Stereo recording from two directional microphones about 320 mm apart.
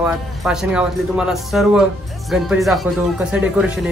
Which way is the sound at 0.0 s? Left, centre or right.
Centre.